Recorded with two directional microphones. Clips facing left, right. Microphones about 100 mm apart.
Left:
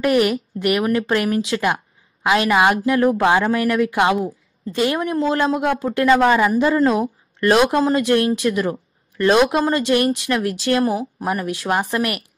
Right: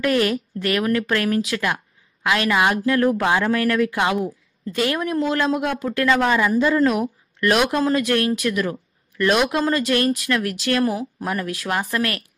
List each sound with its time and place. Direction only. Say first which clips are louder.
0.0 s a woman's voice: left 3 dB; 20° left (ahead or behind)